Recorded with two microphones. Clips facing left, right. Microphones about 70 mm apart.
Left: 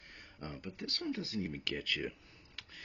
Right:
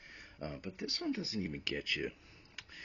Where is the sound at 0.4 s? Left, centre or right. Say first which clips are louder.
Right 2 dB; centre.